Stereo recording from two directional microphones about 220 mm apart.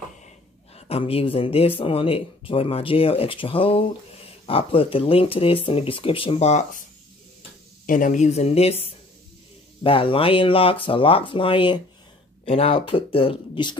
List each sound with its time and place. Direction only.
0.7 s speech: 25° left (ahead or behind)
7.8 s speech: 35° left (ahead or behind)
9.8 s speech: 25° left (ahead or behind)